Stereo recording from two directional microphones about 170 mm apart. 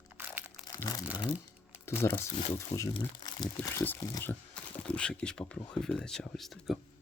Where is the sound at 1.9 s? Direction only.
15° left (ahead or behind).